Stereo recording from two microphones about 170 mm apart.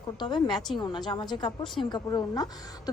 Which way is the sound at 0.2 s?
25° left (ahead or behind).